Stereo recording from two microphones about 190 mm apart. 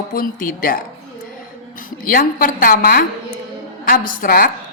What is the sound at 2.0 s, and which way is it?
A woman's voice, 50° left (ahead or behind).